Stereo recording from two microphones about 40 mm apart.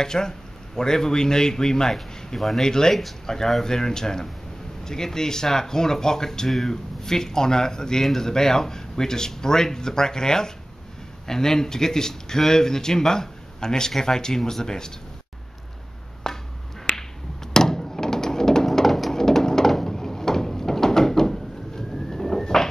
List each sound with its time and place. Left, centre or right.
0.0 s speech: centre
2.0 s speech: centre
16.3 s finger snapping: centre
16.9 s finger snapping: left
17.5 s a sound: centre
18.7 s a sound: centre
19.7 s door: centre